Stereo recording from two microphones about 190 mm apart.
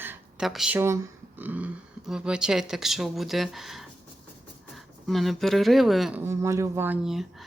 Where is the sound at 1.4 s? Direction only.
10° right (ahead or behind).